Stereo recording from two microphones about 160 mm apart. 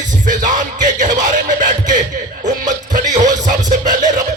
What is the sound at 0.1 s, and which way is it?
Music, 50° right (ahead or behind).